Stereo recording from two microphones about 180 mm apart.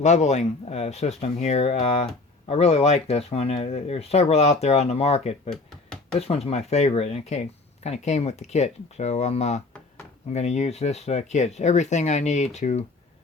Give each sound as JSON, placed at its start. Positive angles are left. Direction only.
{"t": 0.0, "sound": "speech", "side_deg": 40}